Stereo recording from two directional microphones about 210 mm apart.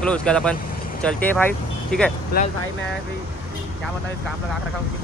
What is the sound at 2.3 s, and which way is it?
Speech, 45° left (ahead or behind).